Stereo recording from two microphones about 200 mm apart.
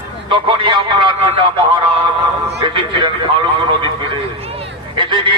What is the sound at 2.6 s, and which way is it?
Speech, 25° right (ahead or behind).